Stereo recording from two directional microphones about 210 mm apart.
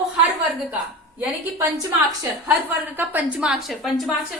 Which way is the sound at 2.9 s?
5° right (ahead or behind).